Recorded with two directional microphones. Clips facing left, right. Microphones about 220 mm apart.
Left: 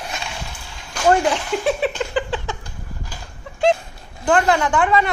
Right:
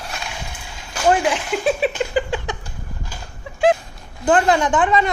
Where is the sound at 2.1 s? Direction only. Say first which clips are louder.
Right 2 dB; 10° right (ahead or behind).